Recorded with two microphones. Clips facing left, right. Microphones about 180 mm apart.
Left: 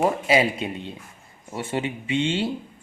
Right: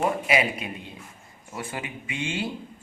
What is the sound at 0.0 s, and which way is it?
Speech, 30° left (ahead or behind).